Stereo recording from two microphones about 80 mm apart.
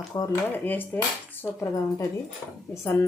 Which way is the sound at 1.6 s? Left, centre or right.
Left.